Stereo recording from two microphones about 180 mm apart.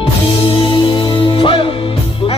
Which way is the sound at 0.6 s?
30° left (ahead or behind).